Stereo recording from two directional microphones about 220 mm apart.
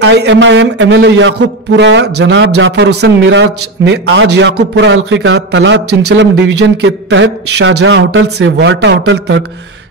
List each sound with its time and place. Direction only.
0.0 s a man's voice: 55° right (ahead or behind)